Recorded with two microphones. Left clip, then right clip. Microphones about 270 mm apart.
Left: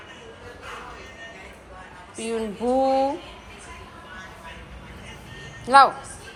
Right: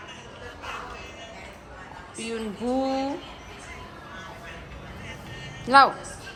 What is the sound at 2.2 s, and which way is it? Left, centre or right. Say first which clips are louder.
Speech: left 5 dB; centre.